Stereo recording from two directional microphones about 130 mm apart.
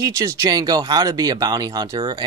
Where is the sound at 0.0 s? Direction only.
25° right (ahead or behind).